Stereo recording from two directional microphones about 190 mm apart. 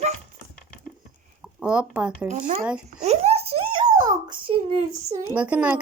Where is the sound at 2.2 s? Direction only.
40° right (ahead or behind); by 4.8 s 25° right (ahead or behind).